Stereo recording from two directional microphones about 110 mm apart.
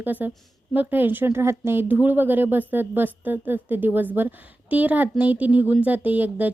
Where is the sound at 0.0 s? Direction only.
15° right (ahead or behind).